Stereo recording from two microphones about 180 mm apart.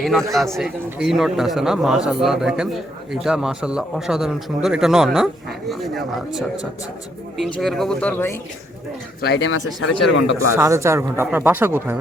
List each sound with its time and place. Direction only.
0.0 s a man's voice: centre (ahead or behind)
9.2 s speech: 70° left (ahead or behind)
10.3 s a man's voice: 15° right (ahead or behind)